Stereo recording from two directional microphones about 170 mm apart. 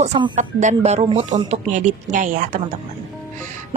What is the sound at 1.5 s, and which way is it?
Speech, 50° right (ahead or behind).